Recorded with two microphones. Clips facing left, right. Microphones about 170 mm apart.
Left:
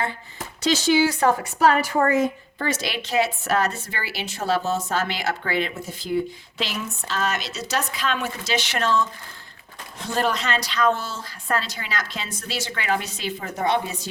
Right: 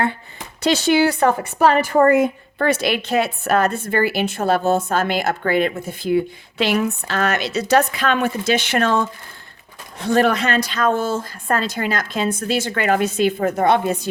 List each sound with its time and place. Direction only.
0.6 s speech: 60° right (ahead or behind)